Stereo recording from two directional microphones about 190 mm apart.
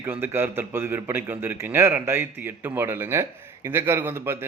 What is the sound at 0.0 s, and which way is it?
A man's voice, 10° right (ahead or behind).